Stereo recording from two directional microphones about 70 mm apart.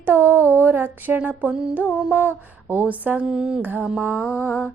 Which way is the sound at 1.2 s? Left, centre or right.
Right.